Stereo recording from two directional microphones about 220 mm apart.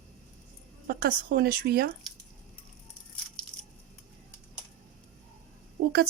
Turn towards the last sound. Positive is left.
turn(degrees=-45)  # may be behind; listen again after turning